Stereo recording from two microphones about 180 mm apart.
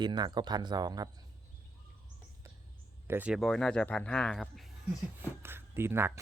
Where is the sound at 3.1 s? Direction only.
5° right (ahead or behind).